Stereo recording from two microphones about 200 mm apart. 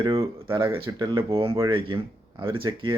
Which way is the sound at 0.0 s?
30° right (ahead or behind).